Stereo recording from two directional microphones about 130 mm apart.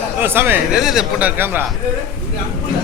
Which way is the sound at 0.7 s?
5° right (ahead or behind).